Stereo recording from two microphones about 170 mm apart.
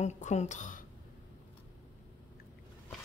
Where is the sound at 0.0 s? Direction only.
40° left (ahead or behind).